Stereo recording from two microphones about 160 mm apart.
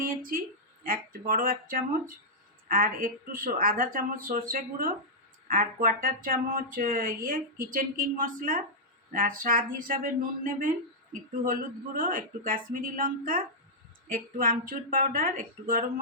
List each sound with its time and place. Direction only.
0.0 s a sound: 60° right (ahead or behind)
0.9 s speech: 60° right (ahead or behind)
11.9 s speech: 60° right (ahead or behind)